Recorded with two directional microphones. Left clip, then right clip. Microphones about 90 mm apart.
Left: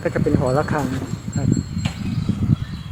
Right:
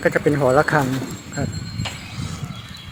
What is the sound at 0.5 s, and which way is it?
Speech, 25° right (ahead or behind).